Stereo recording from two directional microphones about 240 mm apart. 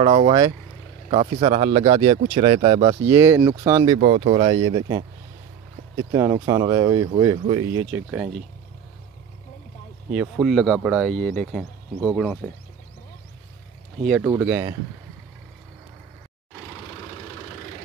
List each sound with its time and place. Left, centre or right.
0.0 s speech: right
4.0 s speech: right
7.9 s speech: centre
10.1 s speech: centre
14.2 s speech: centre